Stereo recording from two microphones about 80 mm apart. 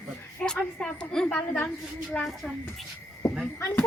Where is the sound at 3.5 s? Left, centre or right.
Left.